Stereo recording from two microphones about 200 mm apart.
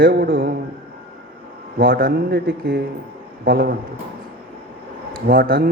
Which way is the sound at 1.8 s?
45° right (ahead or behind).